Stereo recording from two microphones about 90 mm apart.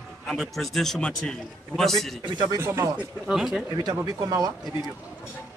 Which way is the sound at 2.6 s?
30° right (ahead or behind).